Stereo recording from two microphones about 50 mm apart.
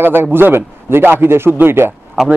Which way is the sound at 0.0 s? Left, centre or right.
Right.